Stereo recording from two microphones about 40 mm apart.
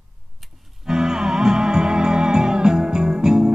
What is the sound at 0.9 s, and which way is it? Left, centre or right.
Music, centre.